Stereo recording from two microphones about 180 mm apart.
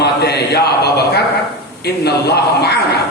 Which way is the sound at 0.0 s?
65° left (ahead or behind).